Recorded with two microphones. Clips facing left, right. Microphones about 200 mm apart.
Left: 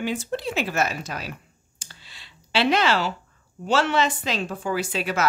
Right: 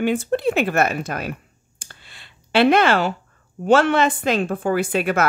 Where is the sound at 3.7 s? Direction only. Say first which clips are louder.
Right 6 dB; 55° right (ahead or behind).